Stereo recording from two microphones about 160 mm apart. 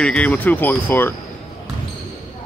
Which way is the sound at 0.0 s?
5° left (ahead or behind).